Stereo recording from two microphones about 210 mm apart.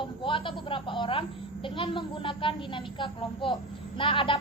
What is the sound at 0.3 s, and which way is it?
A child's voice, 25° left (ahead or behind).